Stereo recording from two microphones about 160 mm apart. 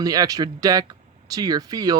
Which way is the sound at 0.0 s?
25° right (ahead or behind).